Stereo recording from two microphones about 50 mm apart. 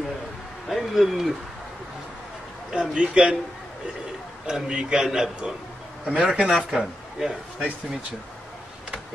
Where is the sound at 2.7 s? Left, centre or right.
Centre.